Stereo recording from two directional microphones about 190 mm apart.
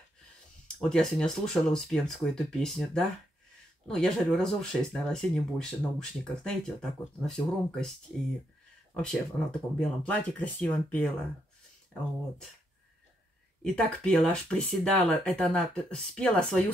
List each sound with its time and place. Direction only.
0.7 s speech: 5° left (ahead or behind)
8.9 s speech: 5° left (ahead or behind)
13.7 s speech: 5° left (ahead or behind)